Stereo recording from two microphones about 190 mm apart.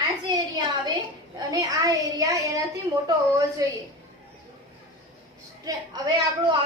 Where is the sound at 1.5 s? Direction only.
20° right (ahead or behind).